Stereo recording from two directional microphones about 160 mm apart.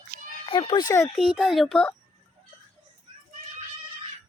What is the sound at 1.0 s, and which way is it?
Speech, 5° left (ahead or behind).